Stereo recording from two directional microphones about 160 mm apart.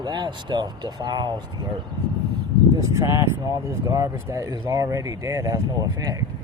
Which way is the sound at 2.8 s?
20° right (ahead or behind).